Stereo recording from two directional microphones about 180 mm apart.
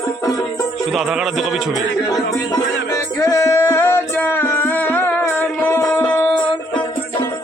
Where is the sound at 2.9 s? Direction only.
20° left (ahead or behind).